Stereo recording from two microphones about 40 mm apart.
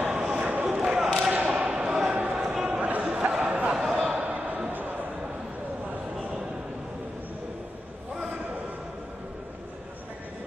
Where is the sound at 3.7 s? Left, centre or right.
Centre.